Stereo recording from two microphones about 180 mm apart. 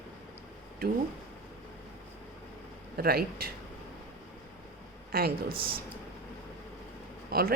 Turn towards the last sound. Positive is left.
turn(degrees=-60)  # may be behind; listen again after turning